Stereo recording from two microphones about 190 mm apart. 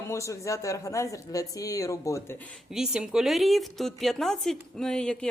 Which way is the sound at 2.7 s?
Centre (ahead or behind).